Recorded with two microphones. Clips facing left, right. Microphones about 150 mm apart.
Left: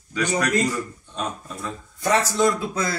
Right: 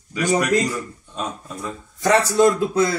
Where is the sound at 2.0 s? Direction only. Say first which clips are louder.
Right 4 dB; 65° right (ahead or behind).